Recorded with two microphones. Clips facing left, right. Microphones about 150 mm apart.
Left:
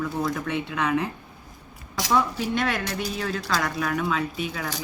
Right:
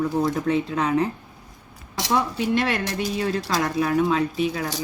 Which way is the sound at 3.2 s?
30° right (ahead or behind).